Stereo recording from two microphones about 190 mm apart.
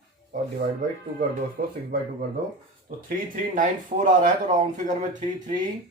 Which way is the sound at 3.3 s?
45° right (ahead or behind).